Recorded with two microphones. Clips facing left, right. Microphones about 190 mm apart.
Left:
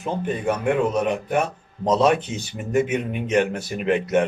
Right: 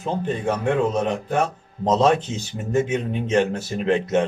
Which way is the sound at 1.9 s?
10° left (ahead or behind).